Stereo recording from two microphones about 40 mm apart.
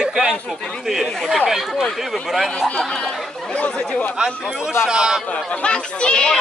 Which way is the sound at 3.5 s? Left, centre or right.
Left.